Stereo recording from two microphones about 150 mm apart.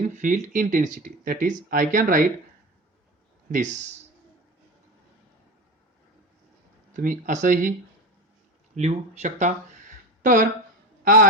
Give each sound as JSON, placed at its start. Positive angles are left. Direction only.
{"t": 0.2, "sound": "speech", "side_deg": -55}
{"t": 3.5, "sound": "speech", "side_deg": -55}
{"t": 6.9, "sound": "speech", "side_deg": -60}
{"t": 8.7, "sound": "speech", "side_deg": -50}
{"t": 10.2, "sound": "a man's voice", "side_deg": -60}